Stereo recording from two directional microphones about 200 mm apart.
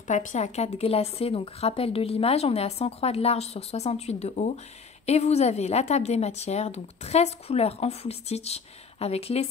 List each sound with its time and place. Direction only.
0.1 s a woman's voice: 35° left (ahead or behind)